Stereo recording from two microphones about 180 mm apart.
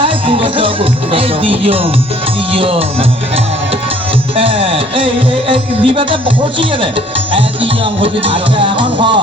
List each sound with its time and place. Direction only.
0.0 s music: 30° right (ahead or behind)
4.4 s music: 30° right (ahead or behind)